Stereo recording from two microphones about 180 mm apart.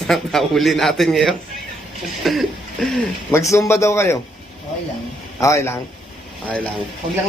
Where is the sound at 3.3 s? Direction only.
15° left (ahead or behind).